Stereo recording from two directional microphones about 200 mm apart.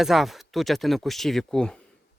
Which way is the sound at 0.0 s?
Centre (ahead or behind).